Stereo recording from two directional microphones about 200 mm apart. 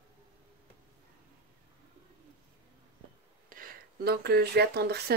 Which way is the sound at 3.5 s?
45° right (ahead or behind).